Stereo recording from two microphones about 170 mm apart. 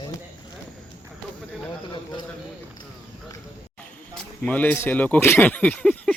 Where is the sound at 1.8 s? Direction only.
25° left (ahead or behind).